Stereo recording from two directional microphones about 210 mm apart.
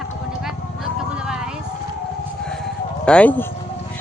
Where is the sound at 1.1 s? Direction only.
5° right (ahead or behind).